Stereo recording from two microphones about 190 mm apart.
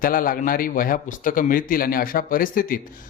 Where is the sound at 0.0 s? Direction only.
50° left (ahead or behind).